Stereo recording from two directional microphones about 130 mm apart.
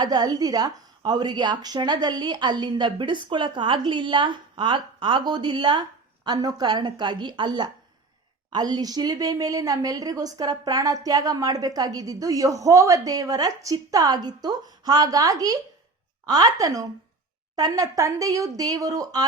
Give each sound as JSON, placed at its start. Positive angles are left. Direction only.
{"t": 0.0, "sound": "a woman's voice", "side_deg": -30}